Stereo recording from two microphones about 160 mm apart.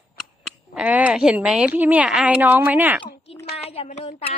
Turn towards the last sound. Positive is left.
turn(degrees=40)  # may be behind; listen again after turning